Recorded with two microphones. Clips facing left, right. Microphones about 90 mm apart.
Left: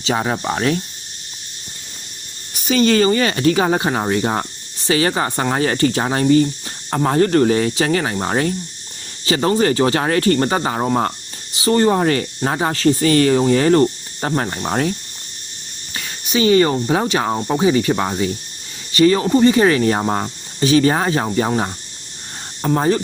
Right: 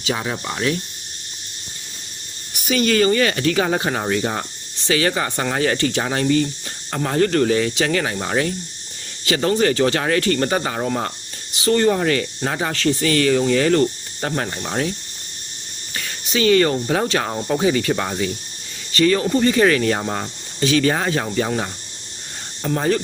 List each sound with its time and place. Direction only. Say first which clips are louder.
0.1 s speech: left 5 dB; 40° left (ahead or behind)
2.6 s speech: left 3 dB; 30° left (ahead or behind)
9.2 s speech: left 2 dB; 30° left (ahead or behind); by 14.9 s 50° left (ahead or behind)
16.3 s speech: left 2 dB; 25° left (ahead or behind)
22.6 s speech: left 3 dB; 35° left (ahead or behind)